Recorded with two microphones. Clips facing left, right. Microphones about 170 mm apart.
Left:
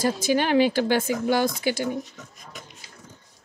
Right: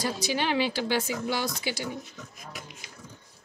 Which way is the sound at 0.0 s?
50° left (ahead or behind).